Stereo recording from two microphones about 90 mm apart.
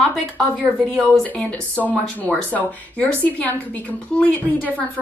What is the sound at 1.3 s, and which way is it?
A woman's voice, 15° left (ahead or behind).